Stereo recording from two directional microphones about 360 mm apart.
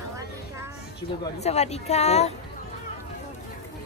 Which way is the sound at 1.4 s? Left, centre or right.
Centre.